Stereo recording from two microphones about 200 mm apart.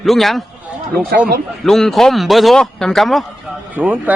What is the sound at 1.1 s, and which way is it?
Speech, 50° right (ahead or behind).